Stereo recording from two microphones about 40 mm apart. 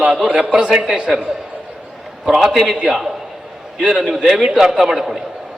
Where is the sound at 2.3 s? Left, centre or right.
Centre.